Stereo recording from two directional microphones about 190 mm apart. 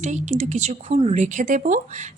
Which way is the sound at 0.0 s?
40° right (ahead or behind).